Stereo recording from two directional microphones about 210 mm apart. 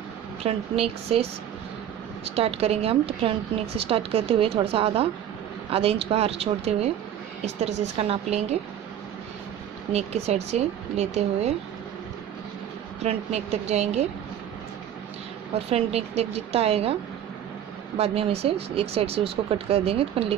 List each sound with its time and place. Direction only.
0.4 s speech: 30° right (ahead or behind)
2.3 s a woman's voice: 30° right (ahead or behind)
9.9 s a woman's voice: 30° right (ahead or behind)
13.0 s a woman's voice: 30° right (ahead or behind)
15.7 s speech: 30° right (ahead or behind)
17.9 s speech: 30° right (ahead or behind)